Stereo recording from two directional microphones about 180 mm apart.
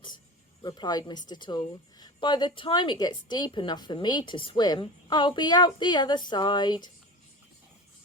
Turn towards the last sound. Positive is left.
turn(degrees=25)  # may be behind; listen again after turning